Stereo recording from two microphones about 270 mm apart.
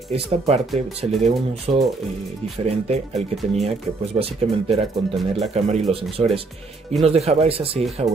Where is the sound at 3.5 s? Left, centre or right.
Right.